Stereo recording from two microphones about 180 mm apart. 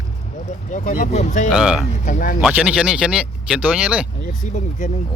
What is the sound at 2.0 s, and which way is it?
Speech, 45° left (ahead or behind).